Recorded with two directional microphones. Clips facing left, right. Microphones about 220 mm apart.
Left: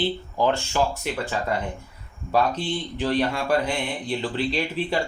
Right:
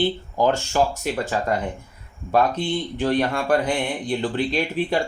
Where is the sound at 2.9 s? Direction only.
50° right (ahead or behind).